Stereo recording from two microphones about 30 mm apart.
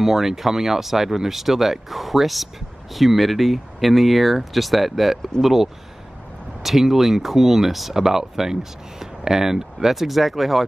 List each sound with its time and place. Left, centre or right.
0.0 s speech: centre
9.9 s speech: centre